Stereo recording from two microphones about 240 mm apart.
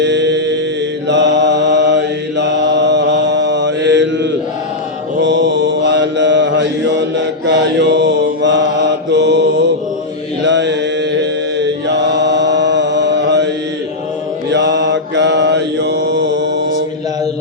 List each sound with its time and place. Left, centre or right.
0.0 s mantra: right
14.5 s mantra: right